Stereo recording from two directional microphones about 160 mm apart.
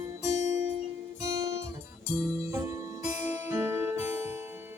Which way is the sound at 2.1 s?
20° right (ahead or behind).